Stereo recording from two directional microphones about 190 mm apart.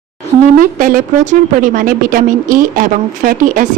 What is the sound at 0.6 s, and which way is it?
A woman's voice, 45° right (ahead or behind).